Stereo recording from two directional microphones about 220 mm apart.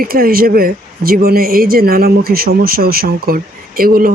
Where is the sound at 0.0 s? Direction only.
40° right (ahead or behind).